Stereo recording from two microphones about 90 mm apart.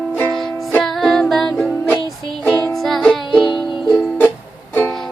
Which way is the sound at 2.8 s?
5° left (ahead or behind).